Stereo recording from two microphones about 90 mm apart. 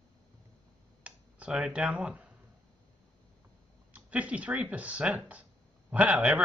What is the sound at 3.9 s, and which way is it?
Speech, 15° right (ahead or behind).